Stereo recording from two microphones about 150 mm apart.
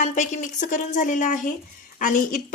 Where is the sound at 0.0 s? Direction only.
60° left (ahead or behind).